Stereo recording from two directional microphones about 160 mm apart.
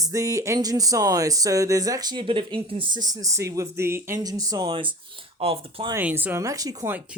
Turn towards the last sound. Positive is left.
turn(degrees=-20)  # may be behind; listen again after turning